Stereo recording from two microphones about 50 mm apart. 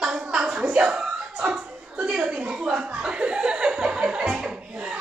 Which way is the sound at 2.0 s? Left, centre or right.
Centre.